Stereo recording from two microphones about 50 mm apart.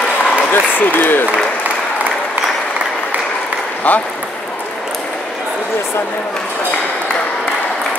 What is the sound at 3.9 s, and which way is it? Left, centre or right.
Speech, left.